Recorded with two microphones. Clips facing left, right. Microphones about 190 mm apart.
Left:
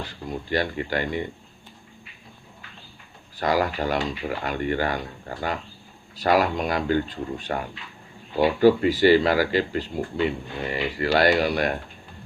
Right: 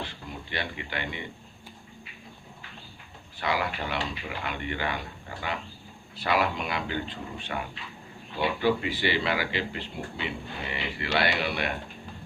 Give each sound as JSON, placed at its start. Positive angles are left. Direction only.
{"t": 0.3, "sound": "speech", "side_deg": 40}
{"t": 3.3, "sound": "speech", "side_deg": 40}